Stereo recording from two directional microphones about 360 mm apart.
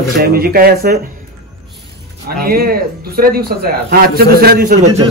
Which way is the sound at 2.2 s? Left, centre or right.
Right.